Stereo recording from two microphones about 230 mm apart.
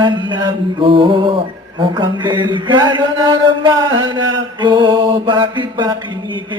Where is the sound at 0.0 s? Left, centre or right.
Centre.